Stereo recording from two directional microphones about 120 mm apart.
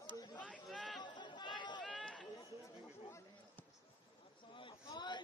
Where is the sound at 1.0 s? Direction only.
40° left (ahead or behind).